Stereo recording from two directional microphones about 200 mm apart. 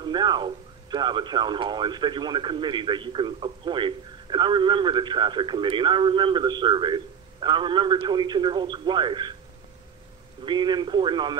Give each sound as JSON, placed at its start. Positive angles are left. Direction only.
{"t": 0.0, "sound": "speech", "side_deg": -20}
{"t": 10.4, "sound": "speech", "side_deg": -25}